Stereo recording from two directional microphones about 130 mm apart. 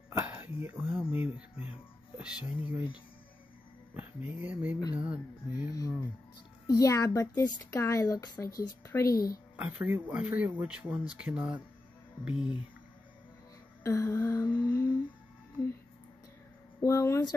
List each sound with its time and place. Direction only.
0.3 s speech: 15° right (ahead or behind)
2.1 s music: 5° right (ahead or behind)
3.9 s speech: 15° right (ahead or behind)
5.7 s a child's voice: 25° left (ahead or behind)
9.6 s speech: 10° right (ahead or behind)
13.8 s a child's voice: 20° left (ahead or behind)
16.8 s a child's voice: 20° left (ahead or behind)